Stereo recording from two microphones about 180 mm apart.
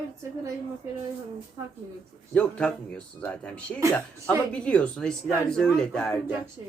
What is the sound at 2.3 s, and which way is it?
Speech, 5° left (ahead or behind).